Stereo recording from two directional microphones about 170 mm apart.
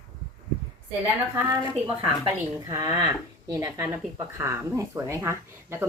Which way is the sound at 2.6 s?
20° right (ahead or behind).